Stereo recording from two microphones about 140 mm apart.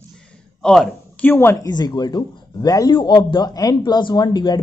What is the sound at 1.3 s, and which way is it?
Speech, 15° left (ahead or behind).